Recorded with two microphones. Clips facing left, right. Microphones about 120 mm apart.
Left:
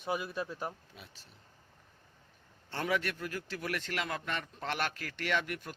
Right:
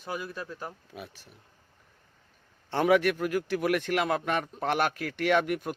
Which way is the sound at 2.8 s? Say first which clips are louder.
Right 10 dB; 65° right (ahead or behind).